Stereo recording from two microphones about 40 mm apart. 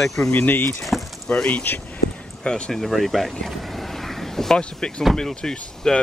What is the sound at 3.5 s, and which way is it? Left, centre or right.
Vehicle, centre.